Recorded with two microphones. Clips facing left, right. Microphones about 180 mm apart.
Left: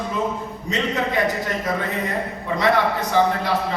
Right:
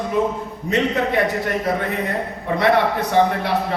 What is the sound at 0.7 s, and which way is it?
Speech, 60° right (ahead or behind).